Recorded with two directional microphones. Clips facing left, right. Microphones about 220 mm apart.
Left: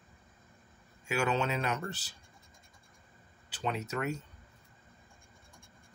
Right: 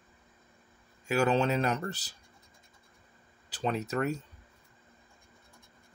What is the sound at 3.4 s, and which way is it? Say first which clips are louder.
Speech: right 4 dB; 35° right (ahead or behind).